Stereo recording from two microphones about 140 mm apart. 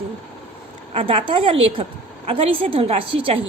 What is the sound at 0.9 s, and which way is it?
A woman's voice, 40° right (ahead or behind).